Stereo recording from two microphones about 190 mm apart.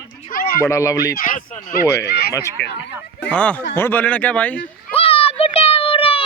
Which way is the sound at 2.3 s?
15° left (ahead or behind).